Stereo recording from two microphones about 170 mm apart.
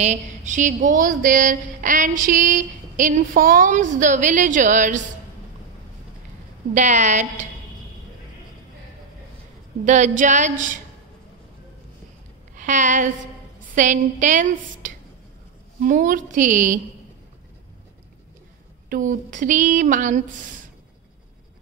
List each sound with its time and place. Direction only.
0.0 s a woman's voice: 45° right (ahead or behind)
6.7 s a woman's voice: 45° right (ahead or behind)
9.8 s a woman's voice: 45° right (ahead or behind)
12.5 s a woman's voice: 45° right (ahead or behind)
18.9 s a woman's voice: 50° right (ahead or behind)